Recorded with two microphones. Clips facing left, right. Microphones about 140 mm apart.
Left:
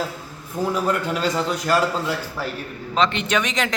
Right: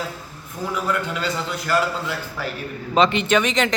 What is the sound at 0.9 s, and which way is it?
A man's voice, 40° left (ahead or behind).